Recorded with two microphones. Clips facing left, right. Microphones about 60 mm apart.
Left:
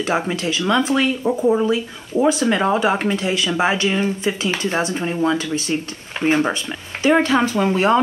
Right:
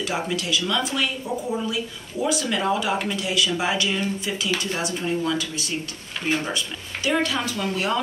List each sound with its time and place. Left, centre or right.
0.3 s speech: left